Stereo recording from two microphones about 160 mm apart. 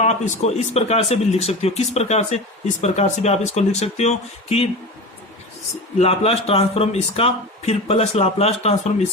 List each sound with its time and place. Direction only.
0.0 s speech: 45° left (ahead or behind)
6.0 s a man's voice: 40° left (ahead or behind)